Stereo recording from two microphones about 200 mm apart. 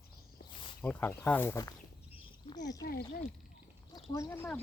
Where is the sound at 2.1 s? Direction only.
25° left (ahead or behind).